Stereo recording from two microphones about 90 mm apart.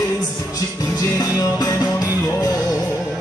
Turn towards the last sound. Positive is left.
turn(degrees=45)  # may be behind; listen again after turning